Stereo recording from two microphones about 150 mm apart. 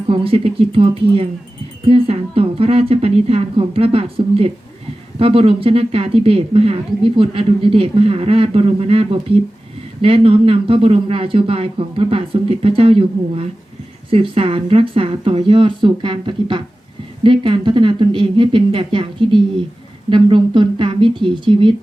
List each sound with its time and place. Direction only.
0.1 s a woman's voice: 40° right (ahead or behind)